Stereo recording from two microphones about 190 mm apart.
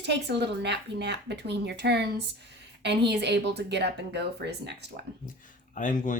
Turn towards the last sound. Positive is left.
turn(degrees=45)  # may be behind; listen again after turning